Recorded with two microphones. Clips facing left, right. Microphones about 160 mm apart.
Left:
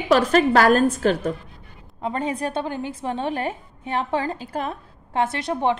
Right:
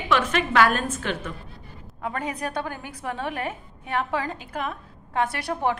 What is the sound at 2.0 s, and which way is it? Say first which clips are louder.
A woman's voice: left 4 dB; 25° left (ahead or behind).